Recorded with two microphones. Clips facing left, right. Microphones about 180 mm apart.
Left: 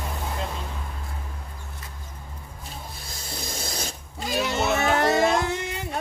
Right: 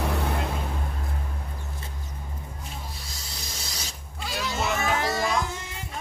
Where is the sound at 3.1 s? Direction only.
55° left (ahead or behind).